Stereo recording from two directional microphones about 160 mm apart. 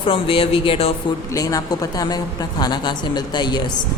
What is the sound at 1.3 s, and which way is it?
A man's voice, 20° left (ahead or behind).